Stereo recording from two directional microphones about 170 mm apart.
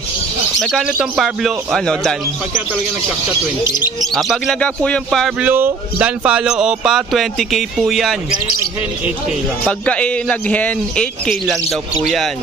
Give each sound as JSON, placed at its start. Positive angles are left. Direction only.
{"t": 0.6, "sound": "speech", "side_deg": 5}
{"t": 3.6, "sound": "speech", "side_deg": 25}
{"t": 4.1, "sound": "speech", "side_deg": 0}
{"t": 5.5, "sound": "speech", "side_deg": -10}
{"t": 9.7, "sound": "a man's voice", "side_deg": 5}